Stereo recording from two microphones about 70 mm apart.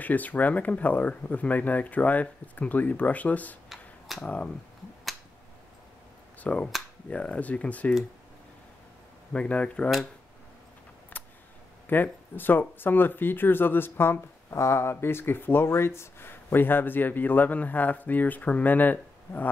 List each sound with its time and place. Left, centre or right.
0.0 s speech: left
3.6 s a sound: centre
4.2 s speech: centre
6.4 s speech: centre
9.3 s speech: centre
11.1 s a sound: left
11.9 s speech: left